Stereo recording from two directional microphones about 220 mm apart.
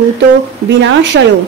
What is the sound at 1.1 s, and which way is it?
Speech, 60° right (ahead or behind).